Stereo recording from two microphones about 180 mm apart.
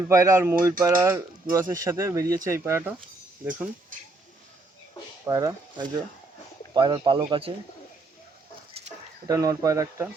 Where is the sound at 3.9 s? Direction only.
45° right (ahead or behind).